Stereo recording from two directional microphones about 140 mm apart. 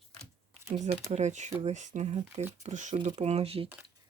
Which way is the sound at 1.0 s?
55° right (ahead or behind).